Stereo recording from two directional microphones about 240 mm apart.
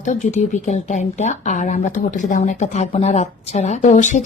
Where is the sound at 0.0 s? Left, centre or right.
Left.